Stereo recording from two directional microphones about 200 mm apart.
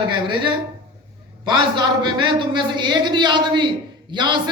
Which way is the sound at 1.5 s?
20° right (ahead or behind).